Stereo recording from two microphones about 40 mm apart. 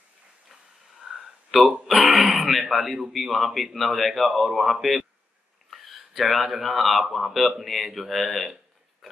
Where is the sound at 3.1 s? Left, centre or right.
Centre.